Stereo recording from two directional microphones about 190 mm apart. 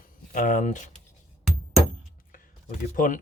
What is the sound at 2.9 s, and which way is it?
Speech, 45° left (ahead or behind).